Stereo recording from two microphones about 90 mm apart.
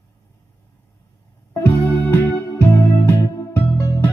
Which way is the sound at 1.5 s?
25° left (ahead or behind).